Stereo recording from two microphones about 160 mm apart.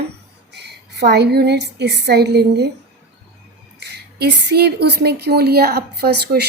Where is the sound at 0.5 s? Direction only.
90° right.